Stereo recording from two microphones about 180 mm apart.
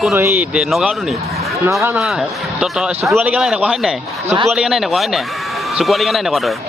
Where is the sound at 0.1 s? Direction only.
15° right (ahead or behind).